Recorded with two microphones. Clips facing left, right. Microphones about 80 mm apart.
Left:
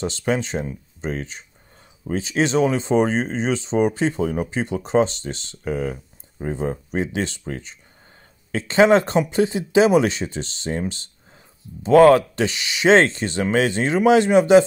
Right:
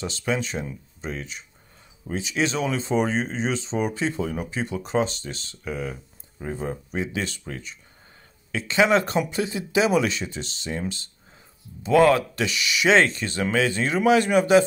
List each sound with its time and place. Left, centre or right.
0.0 s speech: left
11.8 s speech: left